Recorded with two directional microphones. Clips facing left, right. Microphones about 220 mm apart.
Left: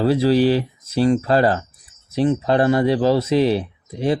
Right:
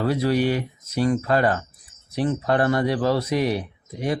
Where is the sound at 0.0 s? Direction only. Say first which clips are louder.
Left 5 dB; 30° left (ahead or behind).